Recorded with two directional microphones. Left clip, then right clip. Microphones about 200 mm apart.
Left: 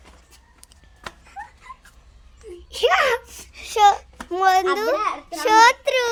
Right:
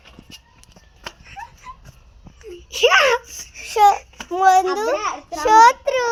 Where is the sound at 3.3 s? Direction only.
55° left (ahead or behind).